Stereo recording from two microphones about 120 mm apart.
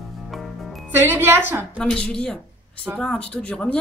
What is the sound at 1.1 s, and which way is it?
Speech, 20° right (ahead or behind).